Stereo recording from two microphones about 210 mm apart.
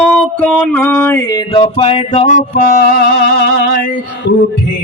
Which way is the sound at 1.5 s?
25° left (ahead or behind).